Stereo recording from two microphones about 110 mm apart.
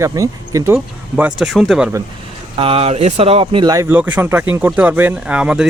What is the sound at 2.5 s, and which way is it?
Speech, 60° right (ahead or behind).